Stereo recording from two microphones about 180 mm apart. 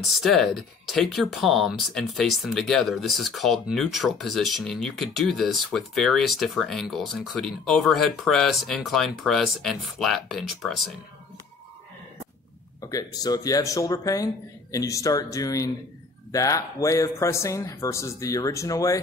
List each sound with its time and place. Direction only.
0.0 s speech: centre (ahead or behind)
12.9 s speech: 20° left (ahead or behind)